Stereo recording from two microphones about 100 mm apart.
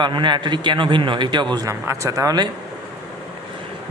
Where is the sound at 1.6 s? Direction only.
30° right (ahead or behind).